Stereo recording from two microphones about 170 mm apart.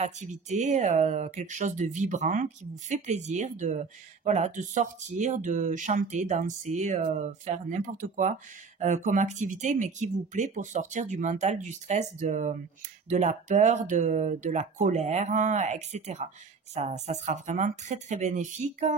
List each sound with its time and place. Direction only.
0.0 s speech: 45° right (ahead or behind)